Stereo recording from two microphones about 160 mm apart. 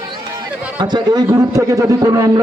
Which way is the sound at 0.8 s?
25° right (ahead or behind).